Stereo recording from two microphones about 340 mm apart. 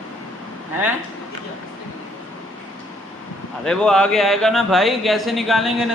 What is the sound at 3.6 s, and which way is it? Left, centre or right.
A man's voice, centre.